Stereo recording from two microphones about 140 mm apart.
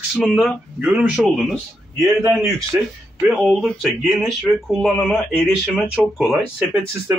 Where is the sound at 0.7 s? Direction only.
10° right (ahead or behind).